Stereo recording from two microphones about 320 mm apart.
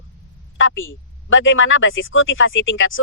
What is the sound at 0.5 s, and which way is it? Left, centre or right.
Speech, left.